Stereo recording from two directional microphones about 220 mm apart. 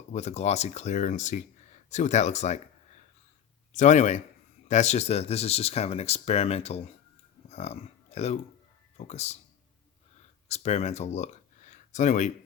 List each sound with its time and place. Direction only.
0.1 s speech: 30° left (ahead or behind)
3.7 s speech: 35° left (ahead or behind)
10.5 s speech: 30° left (ahead or behind)